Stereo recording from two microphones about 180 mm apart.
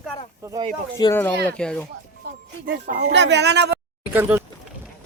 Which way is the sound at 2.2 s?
60° right (ahead or behind).